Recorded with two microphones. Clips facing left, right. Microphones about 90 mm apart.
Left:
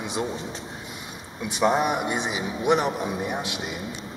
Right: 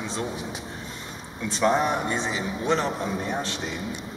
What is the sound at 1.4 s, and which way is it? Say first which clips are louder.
Speech: even; 15° left (ahead or behind).